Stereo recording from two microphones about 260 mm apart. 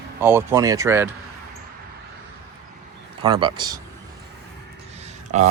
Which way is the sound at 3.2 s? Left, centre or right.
Centre.